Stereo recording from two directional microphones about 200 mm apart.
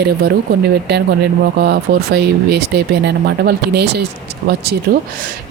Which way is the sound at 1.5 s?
55° right (ahead or behind).